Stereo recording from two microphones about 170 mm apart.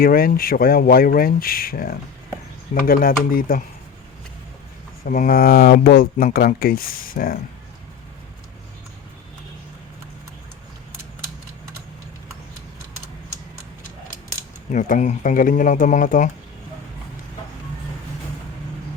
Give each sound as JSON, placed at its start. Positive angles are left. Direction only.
{"t": 0.0, "sound": "speech", "side_deg": 60}
{"t": 5.0, "sound": "speech", "side_deg": 50}
{"t": 14.7, "sound": "speech", "side_deg": 50}